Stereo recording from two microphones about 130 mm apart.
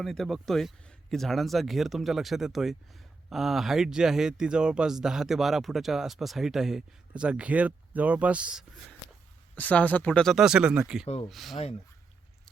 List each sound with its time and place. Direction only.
0.0 s speech: centre (ahead or behind)
9.6 s speech: 10° left (ahead or behind); by 11.0 s 5° right (ahead or behind)
11.0 s speech: 50° left (ahead or behind)
11.3 s speech: centre (ahead or behind)